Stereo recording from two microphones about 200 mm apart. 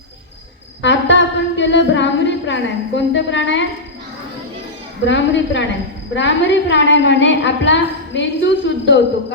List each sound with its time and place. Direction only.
0.8 s a woman's voice: 65° left (ahead or behind)
5.0 s a woman's voice: 65° left (ahead or behind)